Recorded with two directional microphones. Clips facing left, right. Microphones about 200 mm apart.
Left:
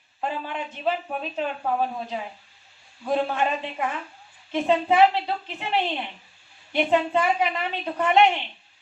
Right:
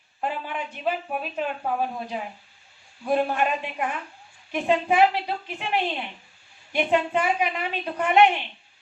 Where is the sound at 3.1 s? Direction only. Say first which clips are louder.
Right 1 dB; 15° right (ahead or behind).